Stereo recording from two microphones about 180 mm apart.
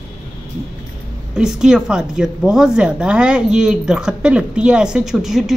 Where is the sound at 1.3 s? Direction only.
5° right (ahead or behind).